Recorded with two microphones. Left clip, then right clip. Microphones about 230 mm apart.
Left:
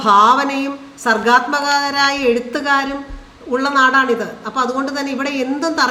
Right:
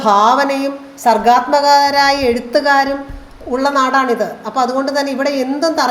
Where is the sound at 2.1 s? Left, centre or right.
Centre.